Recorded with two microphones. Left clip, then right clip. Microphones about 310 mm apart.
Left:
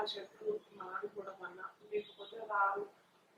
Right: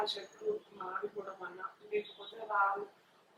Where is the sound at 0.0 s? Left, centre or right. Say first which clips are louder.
Right 3 dB; centre.